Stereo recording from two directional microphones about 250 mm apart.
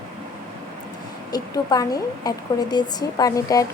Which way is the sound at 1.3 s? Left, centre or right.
Centre.